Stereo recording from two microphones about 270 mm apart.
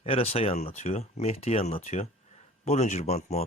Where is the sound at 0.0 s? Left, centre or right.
Left.